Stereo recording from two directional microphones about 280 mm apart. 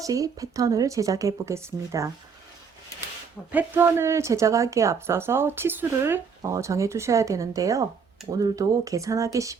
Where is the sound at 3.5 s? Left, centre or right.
Centre.